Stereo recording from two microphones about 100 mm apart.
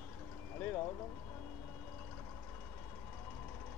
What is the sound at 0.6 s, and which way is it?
Speech, 20° left (ahead or behind).